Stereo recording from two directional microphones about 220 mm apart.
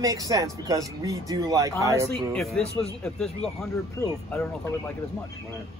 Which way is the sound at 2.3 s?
Centre (ahead or behind).